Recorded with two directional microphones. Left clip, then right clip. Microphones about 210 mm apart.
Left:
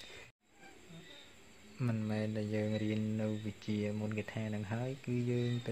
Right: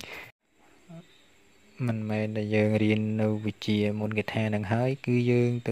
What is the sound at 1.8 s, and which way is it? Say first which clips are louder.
Speech: right 8 dB; 30° right (ahead or behind).